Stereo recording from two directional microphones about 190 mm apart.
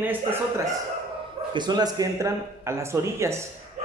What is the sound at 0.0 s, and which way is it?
Speech, 10° right (ahead or behind).